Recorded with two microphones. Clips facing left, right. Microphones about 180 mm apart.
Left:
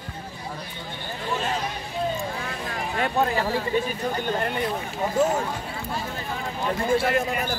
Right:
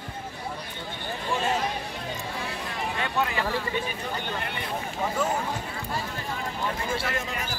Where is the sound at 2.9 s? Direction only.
40° left (ahead or behind).